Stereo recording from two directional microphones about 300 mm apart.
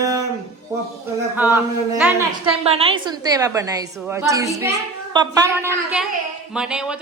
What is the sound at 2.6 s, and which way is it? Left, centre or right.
A woman's voice, centre.